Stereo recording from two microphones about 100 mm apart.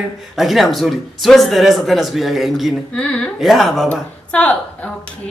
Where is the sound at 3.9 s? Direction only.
15° left (ahead or behind).